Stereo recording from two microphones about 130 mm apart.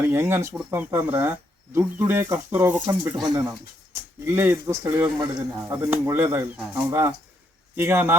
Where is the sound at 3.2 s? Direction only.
30° right (ahead or behind).